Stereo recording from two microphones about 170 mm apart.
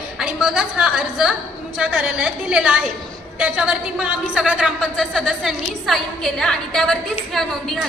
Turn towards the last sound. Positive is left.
turn(degrees=0)  # may be behind; listen again after turning